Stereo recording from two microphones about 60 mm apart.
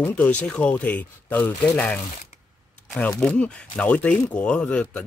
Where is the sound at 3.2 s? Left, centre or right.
Centre.